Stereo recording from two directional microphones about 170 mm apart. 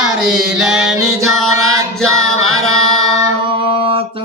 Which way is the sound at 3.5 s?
30° right (ahead or behind).